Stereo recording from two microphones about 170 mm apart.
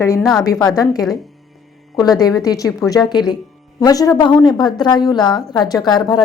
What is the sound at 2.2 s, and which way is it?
A woman's voice, 20° left (ahead or behind).